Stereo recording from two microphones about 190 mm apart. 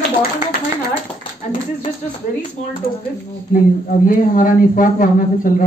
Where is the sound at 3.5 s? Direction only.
45° left (ahead or behind).